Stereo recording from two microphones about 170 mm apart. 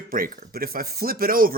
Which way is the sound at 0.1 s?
60° right (ahead or behind).